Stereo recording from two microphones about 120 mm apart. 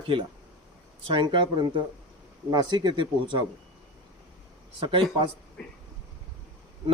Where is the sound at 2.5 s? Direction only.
35° right (ahead or behind).